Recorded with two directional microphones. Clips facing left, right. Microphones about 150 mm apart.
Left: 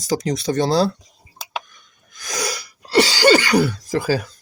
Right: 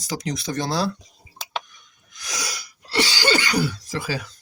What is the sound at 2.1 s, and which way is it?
Cough, 50° left (ahead or behind).